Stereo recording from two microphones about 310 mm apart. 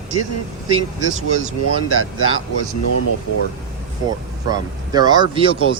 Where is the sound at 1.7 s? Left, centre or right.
Right.